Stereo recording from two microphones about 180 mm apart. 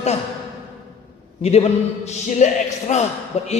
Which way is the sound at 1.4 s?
35° left (ahead or behind).